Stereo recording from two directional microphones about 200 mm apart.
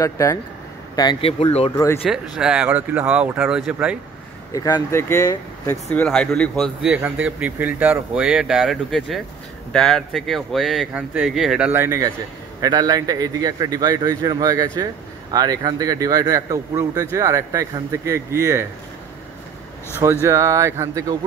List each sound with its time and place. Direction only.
0.0 s speech: 15° left (ahead or behind)
2.0 s speech: 5° right (ahead or behind)
4.5 s a man's voice: 20° left (ahead or behind); by 18.7 s 10° right (ahead or behind)
20.0 s speech: 15° right (ahead or behind)